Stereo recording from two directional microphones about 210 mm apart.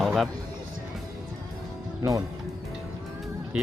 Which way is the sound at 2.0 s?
15° right (ahead or behind).